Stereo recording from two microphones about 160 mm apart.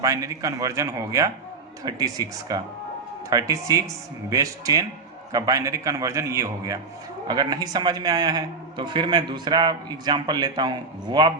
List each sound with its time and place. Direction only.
0.0 s a man's voice: 20° right (ahead or behind)